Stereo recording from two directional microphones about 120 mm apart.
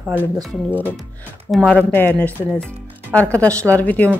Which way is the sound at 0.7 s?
15° left (ahead or behind).